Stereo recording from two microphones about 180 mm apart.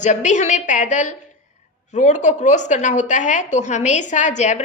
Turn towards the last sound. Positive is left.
turn(degrees=40)  # may be behind; listen again after turning